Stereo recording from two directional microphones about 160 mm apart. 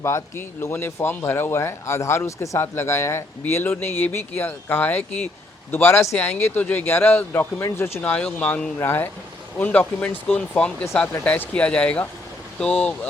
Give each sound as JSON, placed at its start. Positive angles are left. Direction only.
{"t": 0.0, "sound": "speech", "side_deg": 15}